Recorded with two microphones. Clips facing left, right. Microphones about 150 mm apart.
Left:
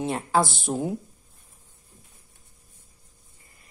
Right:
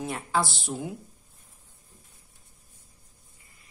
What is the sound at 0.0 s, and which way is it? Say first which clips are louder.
Speech: left 5 dB; 30° left (ahead or behind).